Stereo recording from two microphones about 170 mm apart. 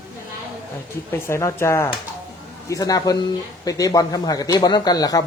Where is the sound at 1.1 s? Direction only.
15° left (ahead or behind).